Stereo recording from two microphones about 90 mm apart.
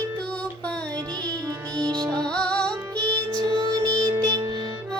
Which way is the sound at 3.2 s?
50° right (ahead or behind).